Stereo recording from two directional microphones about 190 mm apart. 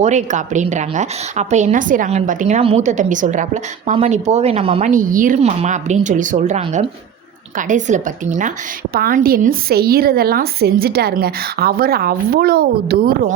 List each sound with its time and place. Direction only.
0.0 s a woman's voice: 40° right (ahead or behind)
4.9 s a woman's voice: 45° right (ahead or behind)